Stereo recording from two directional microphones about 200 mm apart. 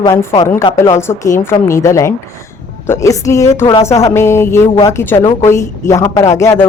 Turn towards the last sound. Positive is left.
turn(degrees=15)  # may be behind; listen again after turning